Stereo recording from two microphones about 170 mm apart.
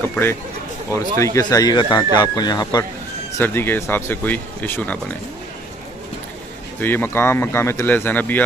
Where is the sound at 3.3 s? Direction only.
10° left (ahead or behind).